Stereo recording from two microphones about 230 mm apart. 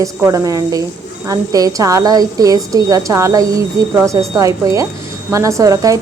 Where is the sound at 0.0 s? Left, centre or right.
Centre.